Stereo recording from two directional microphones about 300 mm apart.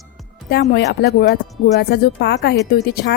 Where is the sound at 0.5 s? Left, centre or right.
Left.